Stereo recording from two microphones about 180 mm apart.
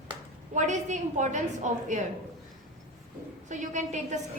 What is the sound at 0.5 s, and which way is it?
A woman's voice, 40° right (ahead or behind).